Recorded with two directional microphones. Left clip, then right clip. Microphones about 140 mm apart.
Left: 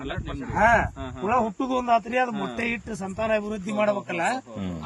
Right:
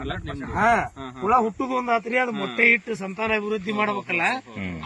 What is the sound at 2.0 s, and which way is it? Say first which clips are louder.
Speech: right 1 dB; 35° left (ahead or behind).